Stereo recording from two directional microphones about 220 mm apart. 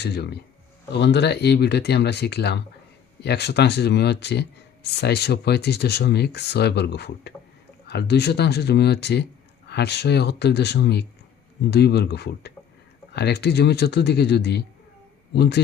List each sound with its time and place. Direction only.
0.0 s speech: 50° left (ahead or behind)